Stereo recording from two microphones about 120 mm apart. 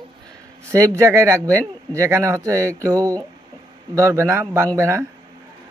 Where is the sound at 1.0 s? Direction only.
25° right (ahead or behind).